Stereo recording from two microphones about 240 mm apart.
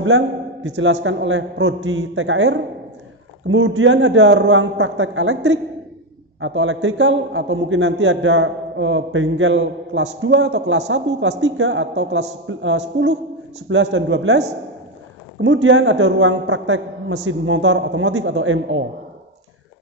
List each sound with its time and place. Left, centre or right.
0.7 s a man's voice: right
15.4 s a man's voice: right